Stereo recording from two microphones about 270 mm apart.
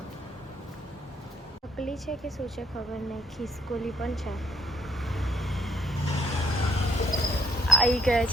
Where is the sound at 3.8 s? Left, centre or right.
Centre.